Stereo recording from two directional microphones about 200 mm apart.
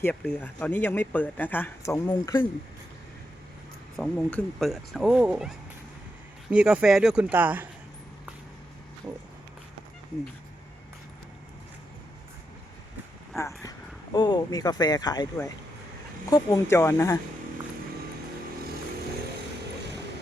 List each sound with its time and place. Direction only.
0.0 s speech: 5° left (ahead or behind)
3.9 s speech: 5° left (ahead or behind)
13.6 s speech: 20° left (ahead or behind)